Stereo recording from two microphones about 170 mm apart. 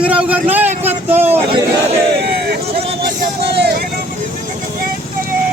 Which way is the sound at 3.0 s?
70° right (ahead or behind).